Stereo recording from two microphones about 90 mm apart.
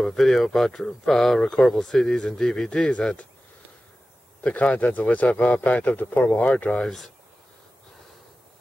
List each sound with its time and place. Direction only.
0.0 s speech: 5° left (ahead or behind)
4.4 s speech: 15° left (ahead or behind)